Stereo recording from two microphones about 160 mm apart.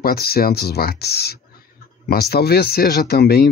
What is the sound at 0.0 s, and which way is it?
Speech, 75° left (ahead or behind).